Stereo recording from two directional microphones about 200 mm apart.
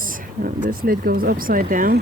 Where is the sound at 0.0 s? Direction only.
45° right (ahead or behind).